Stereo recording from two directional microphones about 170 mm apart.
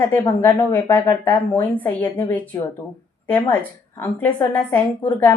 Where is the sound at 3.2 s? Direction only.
10° left (ahead or behind).